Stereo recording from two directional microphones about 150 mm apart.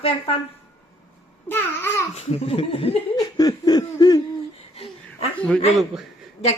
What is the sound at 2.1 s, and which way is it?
Speech, 45° left (ahead or behind).